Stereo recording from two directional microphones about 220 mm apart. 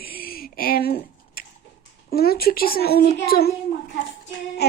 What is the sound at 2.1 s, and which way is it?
A child's voice, 45° left (ahead or behind).